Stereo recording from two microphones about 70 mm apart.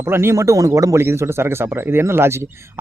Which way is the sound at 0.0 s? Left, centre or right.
Right.